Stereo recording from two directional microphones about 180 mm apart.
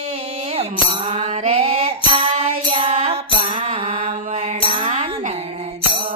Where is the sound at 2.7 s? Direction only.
30° right (ahead or behind).